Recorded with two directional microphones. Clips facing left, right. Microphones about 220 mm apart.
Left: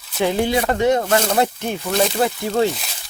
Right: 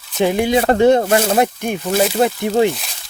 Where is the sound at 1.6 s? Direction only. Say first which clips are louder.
Right 3 dB; 10° right (ahead or behind).